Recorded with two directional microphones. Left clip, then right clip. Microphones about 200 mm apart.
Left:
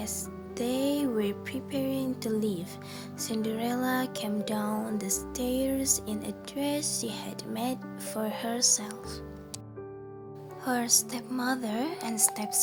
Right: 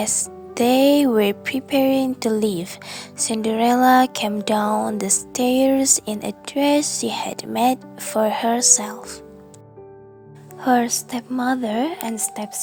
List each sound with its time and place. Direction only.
0.0 s music: 45° right (ahead or behind)
10.6 s a woman's voice: 35° right (ahead or behind)